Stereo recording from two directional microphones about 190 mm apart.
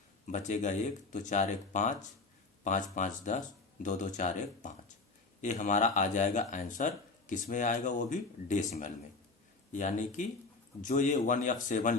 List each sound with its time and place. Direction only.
0.3 s a man's voice: 40° left (ahead or behind)